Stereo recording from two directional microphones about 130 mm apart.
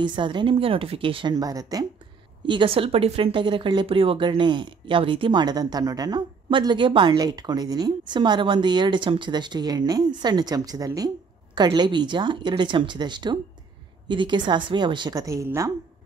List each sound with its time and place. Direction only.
0.0 s a woman's voice: 35° right (ahead or behind)
1.3 s a woman's voice: 30° right (ahead or behind)
2.4 s a woman's voice: 40° right (ahead or behind); by 15.7 s 25° right (ahead or behind)